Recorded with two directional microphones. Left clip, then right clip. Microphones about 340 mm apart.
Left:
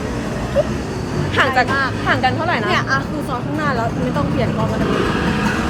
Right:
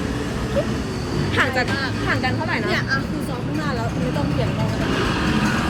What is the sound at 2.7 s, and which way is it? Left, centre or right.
Speech, centre.